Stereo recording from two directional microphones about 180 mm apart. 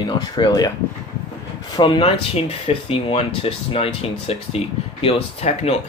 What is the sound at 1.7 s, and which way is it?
Speech, 25° left (ahead or behind).